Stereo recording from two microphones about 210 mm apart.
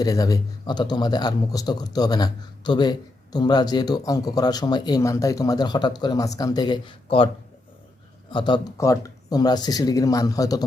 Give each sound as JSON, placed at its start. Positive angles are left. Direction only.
{"t": 0.0, "sound": "speech", "side_deg": 15}
{"t": 8.3, "sound": "speech", "side_deg": 20}